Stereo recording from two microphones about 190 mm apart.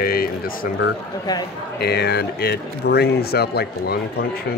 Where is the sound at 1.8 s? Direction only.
60° left (ahead or behind).